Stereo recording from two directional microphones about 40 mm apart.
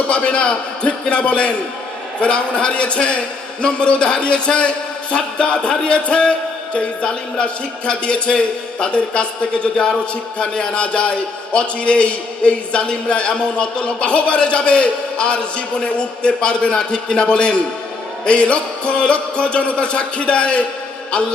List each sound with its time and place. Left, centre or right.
0.1 s a man's voice: left